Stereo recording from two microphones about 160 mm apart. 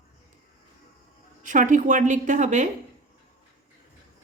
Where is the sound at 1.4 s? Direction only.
55° right (ahead or behind).